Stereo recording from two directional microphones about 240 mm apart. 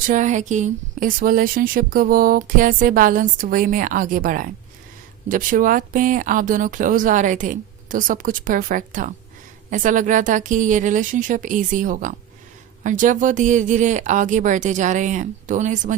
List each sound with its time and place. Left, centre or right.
0.0 s speech: right